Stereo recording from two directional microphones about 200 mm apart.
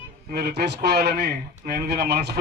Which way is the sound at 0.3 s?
50° right (ahead or behind).